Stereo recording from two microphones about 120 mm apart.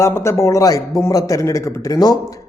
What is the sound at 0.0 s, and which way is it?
Speech, 20° left (ahead or behind).